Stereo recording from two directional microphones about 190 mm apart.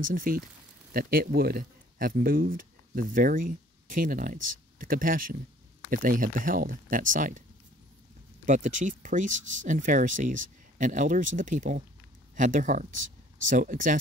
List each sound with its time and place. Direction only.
0.0 s speech: 45° right (ahead or behind)
8.5 s speech: 40° right (ahead or behind)